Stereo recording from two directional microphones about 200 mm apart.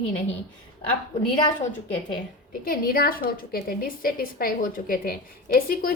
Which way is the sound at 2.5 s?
45° left (ahead or behind).